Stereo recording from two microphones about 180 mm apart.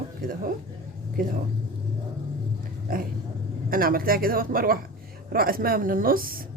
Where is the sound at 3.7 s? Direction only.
55° right (ahead or behind).